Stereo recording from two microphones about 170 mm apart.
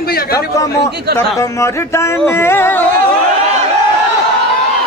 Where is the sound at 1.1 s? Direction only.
20° left (ahead or behind).